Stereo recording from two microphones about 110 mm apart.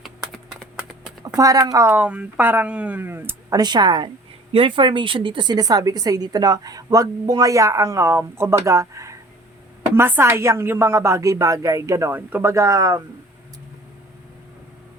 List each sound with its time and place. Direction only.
1.4 s a woman's voice: 30° right (ahead or behind)
1.9 s speech: 15° right (ahead or behind)
3.5 s a woman's voice: 40° right (ahead or behind)